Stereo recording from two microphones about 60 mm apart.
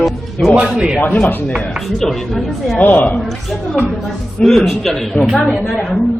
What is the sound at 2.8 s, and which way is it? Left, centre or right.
Speech, left.